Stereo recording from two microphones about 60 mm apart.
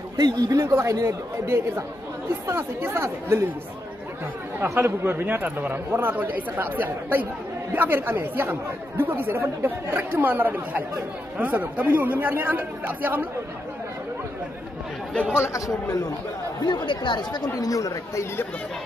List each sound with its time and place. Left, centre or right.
0.2 s speech: right
2.4 s speech: right
4.8 s speech: right
5.2 s a man's voice: right
15.3 s speech: left
17.6 s speech: left